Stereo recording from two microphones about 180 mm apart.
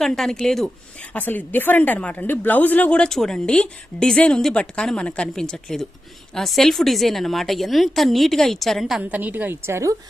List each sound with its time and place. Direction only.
0.0 s a woman's voice: centre (ahead or behind); by 9.9 s 15° right (ahead or behind)